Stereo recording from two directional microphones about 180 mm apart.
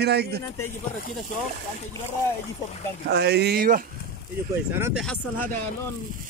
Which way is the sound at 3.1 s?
65° right (ahead or behind).